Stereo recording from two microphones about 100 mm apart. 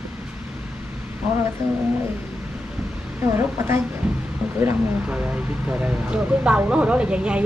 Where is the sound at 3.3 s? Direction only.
25° right (ahead or behind).